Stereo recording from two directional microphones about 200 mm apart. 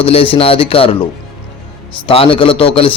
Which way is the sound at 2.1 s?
25° left (ahead or behind).